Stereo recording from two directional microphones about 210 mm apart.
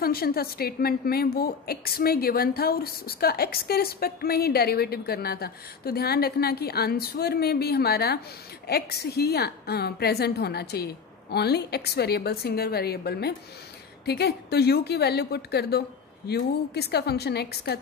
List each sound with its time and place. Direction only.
0.0 s a woman's voice: 45° left (ahead or behind)